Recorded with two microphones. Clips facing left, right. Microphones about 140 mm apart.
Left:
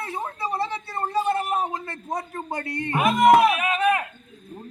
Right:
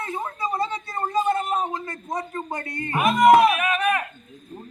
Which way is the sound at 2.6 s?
75° left (ahead or behind).